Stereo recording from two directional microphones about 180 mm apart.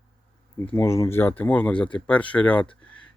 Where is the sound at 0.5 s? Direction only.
15° left (ahead or behind).